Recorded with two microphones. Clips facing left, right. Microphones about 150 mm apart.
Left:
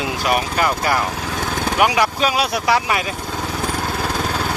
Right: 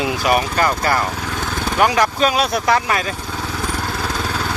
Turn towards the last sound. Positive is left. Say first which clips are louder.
# right 1 dB
turn(degrees=10)  # may be behind; listen again after turning